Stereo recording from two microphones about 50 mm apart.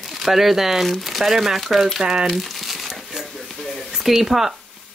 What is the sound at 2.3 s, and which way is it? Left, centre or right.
Crumpling, centre.